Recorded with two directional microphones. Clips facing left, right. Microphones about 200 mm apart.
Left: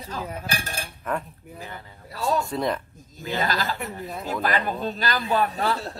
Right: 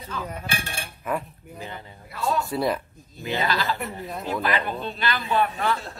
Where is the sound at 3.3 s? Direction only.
45° left (ahead or behind).